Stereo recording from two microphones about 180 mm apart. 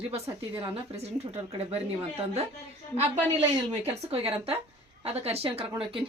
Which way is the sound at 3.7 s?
35° right (ahead or behind).